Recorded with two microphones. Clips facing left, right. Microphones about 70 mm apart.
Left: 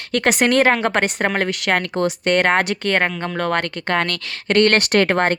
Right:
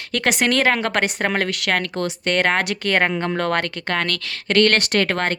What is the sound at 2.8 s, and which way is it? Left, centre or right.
Speech, centre.